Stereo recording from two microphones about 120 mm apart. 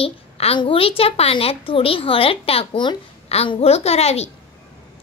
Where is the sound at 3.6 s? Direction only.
60° left (ahead or behind).